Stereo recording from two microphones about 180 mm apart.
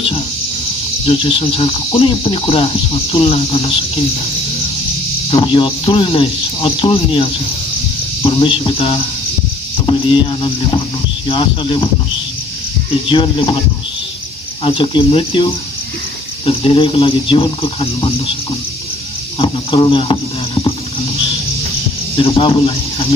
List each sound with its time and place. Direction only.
1.0 s speech: 30° left (ahead or behind)
5.3 s speech: 30° left (ahead or behind)
13.1 s speech: 25° left (ahead or behind)
14.6 s speech: 30° left (ahead or behind)
19.3 s speech: 30° left (ahead or behind)
22.1 s speech: 30° left (ahead or behind)